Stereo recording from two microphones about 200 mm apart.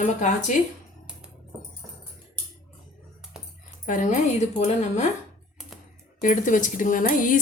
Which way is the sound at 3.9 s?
40° left (ahead or behind).